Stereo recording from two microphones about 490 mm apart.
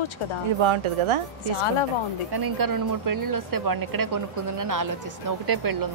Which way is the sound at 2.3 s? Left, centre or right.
Right.